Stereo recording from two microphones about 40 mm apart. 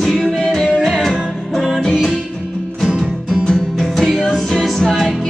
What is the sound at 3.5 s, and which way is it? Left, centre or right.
Music, centre.